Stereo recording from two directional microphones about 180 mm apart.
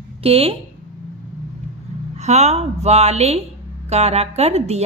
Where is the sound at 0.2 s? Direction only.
35° right (ahead or behind).